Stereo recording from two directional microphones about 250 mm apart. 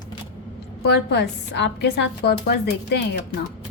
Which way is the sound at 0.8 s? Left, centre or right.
Left.